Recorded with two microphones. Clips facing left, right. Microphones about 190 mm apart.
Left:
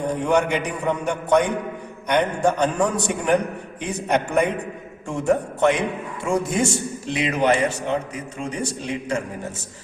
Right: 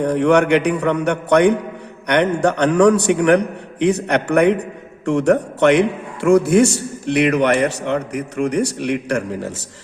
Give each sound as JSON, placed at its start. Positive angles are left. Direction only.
{"t": 0.0, "sound": "a man's voice", "side_deg": -75}